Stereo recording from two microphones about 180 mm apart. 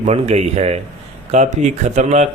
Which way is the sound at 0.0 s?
35° right (ahead or behind).